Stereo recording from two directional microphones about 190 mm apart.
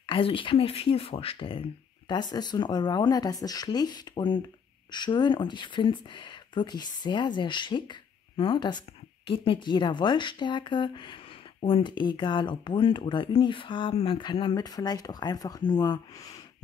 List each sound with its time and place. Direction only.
0.0 s speech: 25° left (ahead or behind)